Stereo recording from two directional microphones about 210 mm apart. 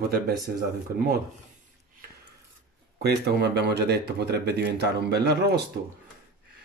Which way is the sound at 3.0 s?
50° right (ahead or behind).